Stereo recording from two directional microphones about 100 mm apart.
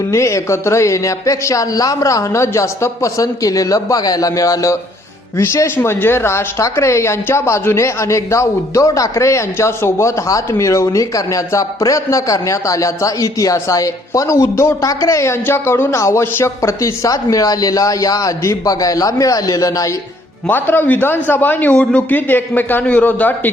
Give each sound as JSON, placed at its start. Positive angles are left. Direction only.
{"t": 0.1, "sound": "speech", "side_deg": 30}
{"t": 20.5, "sound": "a man's voice", "side_deg": 20}